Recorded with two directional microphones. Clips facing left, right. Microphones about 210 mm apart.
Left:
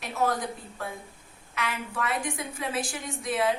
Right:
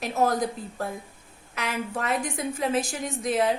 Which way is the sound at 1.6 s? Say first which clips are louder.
Right 2 dB; 40° right (ahead or behind).